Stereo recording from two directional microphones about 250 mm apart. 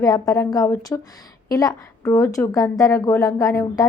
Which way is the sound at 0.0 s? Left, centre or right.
Centre.